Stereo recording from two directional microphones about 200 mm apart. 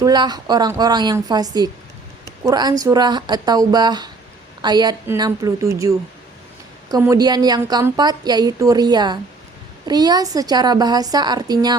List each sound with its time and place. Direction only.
0.0 s a woman's voice: 20° right (ahead or behind)